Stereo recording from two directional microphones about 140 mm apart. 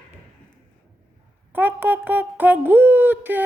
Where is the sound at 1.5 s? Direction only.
10° right (ahead or behind).